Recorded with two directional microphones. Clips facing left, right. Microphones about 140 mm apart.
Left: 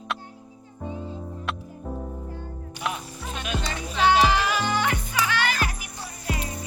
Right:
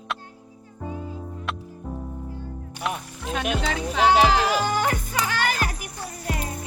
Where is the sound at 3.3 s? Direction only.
80° right.